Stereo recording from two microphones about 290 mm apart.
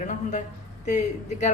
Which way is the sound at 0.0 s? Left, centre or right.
Left.